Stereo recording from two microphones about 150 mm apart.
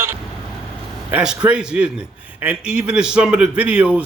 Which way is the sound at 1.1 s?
5° right (ahead or behind).